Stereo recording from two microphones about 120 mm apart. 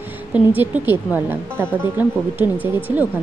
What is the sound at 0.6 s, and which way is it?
A woman's voice, 15° right (ahead or behind).